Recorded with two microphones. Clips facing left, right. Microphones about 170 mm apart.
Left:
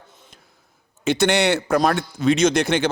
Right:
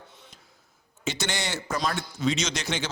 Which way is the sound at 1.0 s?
60° left (ahead or behind).